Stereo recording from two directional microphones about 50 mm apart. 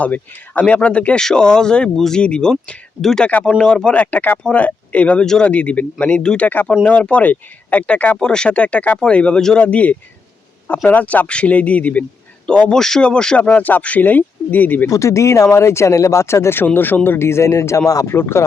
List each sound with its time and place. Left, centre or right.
0.0 s speech: left
1.2 s speech: centre
2.2 s speech: centre
3.9 s speech: left
5.2 s speech: centre
5.5 s speech: left
8.2 s speech: centre
12.5 s speech: centre; by 14.8 s left
14.9 s speech: left
15.5 s speech: left
16.7 s speech: left